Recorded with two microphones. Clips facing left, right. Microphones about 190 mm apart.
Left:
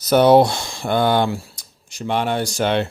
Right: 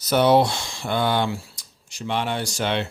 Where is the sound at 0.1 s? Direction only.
45° left (ahead or behind).